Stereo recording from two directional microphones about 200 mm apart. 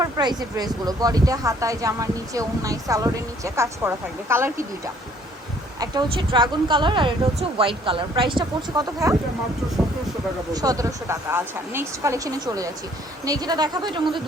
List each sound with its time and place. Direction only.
0.0 s speech: 20° right (ahead or behind)
5.8 s speech: 20° right (ahead or behind)
10.5 s speech: 20° right (ahead or behind)